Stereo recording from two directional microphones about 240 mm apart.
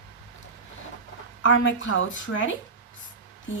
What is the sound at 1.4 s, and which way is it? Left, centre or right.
Speech, left.